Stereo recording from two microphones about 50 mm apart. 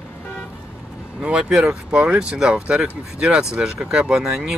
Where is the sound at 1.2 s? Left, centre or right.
Centre.